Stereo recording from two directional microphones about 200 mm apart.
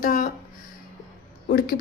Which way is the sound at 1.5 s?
50° left (ahead or behind).